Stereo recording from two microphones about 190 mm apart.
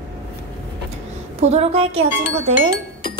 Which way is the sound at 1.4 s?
30° right (ahead or behind).